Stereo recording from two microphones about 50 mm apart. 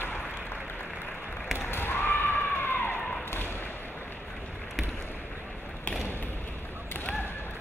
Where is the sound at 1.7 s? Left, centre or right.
Left.